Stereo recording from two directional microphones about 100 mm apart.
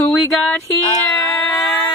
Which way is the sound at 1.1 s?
35° left (ahead or behind).